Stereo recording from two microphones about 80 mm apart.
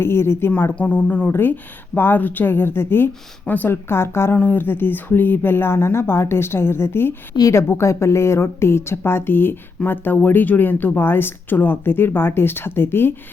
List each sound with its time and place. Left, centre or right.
0.0 s a woman's voice: left
0.5 s a woman's voice: left